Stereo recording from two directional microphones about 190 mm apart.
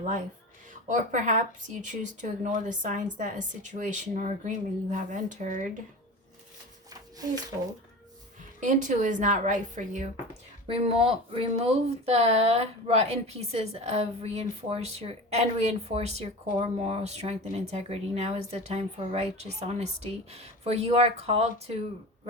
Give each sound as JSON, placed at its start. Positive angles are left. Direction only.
{"t": 0.7, "sound": "speech", "side_deg": -40}
{"t": 8.6, "sound": "speech", "side_deg": -40}
{"t": 10.7, "sound": "speech", "side_deg": -30}